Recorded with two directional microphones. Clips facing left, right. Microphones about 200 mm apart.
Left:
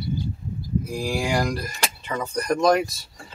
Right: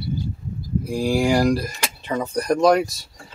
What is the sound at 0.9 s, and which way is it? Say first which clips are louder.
Speech: right 7 dB; 30° right (ahead or behind).